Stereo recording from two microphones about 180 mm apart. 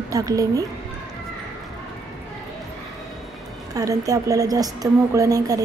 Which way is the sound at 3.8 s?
20° right (ahead or behind).